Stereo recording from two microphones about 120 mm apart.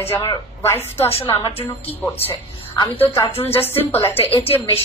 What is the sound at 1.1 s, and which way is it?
Speech, 50° left (ahead or behind).